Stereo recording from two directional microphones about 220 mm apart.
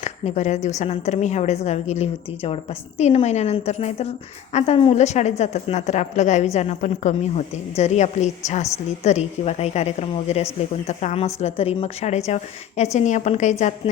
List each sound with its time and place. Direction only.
0.0 s a woman's voice: 30° left (ahead or behind)